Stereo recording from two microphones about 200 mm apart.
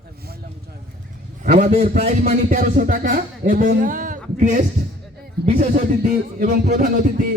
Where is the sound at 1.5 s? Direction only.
40° right (ahead or behind).